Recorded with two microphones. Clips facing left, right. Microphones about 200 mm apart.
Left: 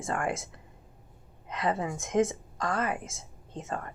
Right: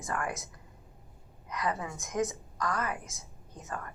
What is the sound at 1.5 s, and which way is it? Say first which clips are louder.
Speech: left 4 dB; 25° left (ahead or behind).